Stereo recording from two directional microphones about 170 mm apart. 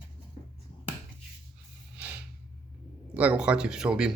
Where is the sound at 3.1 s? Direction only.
10° right (ahead or behind).